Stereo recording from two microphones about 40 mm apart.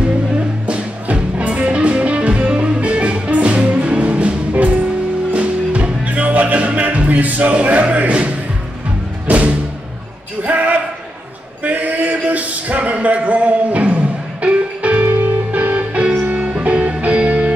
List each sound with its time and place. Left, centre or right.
0.7 s music: right
9.3 s music: right
10.4 s basketball bounce: right
11.6 s a sound: right
15.0 s music: right